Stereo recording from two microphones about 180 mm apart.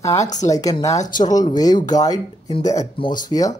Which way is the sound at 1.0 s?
45° left (ahead or behind).